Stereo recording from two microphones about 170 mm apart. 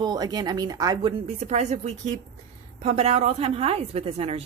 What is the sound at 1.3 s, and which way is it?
A woman's voice, 40° right (ahead or behind).